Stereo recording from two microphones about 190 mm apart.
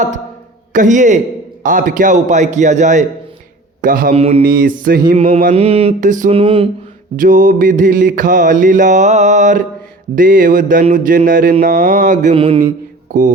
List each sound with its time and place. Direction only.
0.7 s a man's voice: 40° right (ahead or behind)
4.1 s a man's voice: 30° right (ahead or behind)
4.4 s music: 50° right (ahead or behind)
5.5 s a man's voice: 30° right (ahead or behind)
6.3 s mantra: 30° right (ahead or behind)
7.2 s music: 45° right (ahead or behind)
11.6 s a man's voice: 50° right (ahead or behind); by 12.7 s 25° right (ahead or behind)
13.1 s a sound: 45° right (ahead or behind)